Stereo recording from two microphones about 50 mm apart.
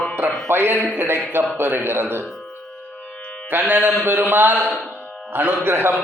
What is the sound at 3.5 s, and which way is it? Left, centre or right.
A man's voice, right.